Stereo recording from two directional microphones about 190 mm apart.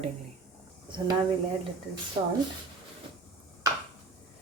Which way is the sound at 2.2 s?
20° right (ahead or behind).